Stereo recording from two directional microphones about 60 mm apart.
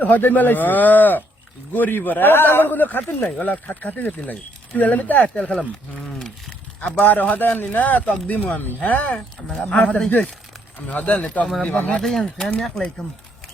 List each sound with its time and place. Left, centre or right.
0.0 s a man's voice: left
5.5 s speech: centre
7.0 s speech: left
9.1 s speech: centre
12.0 s speech: centre